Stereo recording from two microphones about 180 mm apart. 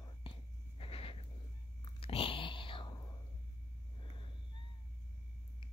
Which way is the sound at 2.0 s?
30° left (ahead or behind).